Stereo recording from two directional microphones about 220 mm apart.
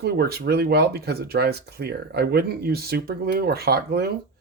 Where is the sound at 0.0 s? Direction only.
45° right (ahead or behind).